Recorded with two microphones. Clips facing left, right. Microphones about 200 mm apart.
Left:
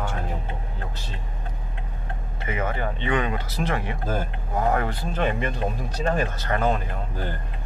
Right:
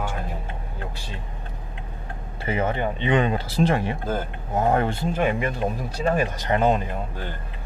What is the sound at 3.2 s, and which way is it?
Speech, 30° right (ahead or behind).